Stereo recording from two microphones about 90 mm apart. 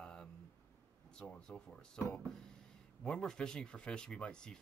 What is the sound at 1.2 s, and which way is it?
A man's voice, 10° left (ahead or behind).